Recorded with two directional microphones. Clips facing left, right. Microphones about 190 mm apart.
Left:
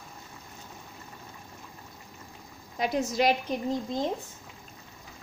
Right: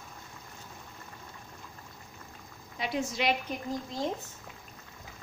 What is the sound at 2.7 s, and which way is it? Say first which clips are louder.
Speech: left 5 dB; 45° left (ahead or behind).